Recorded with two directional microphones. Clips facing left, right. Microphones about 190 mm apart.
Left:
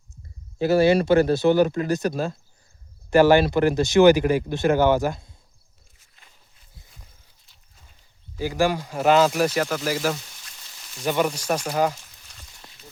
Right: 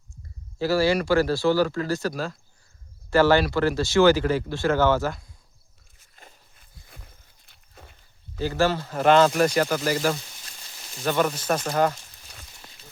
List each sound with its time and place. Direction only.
0.6 s speech: 20° left (ahead or behind)
6.1 s wild animals: 45° right (ahead or behind)
7.4 s walk: 65° right (ahead or behind)
8.4 s speech: 10° left (ahead or behind)
11.0 s speech: 10° left (ahead or behind)